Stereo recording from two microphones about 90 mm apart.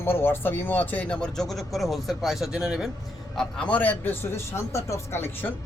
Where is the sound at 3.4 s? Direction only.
10° left (ahead or behind); by 5.5 s 30° left (ahead or behind).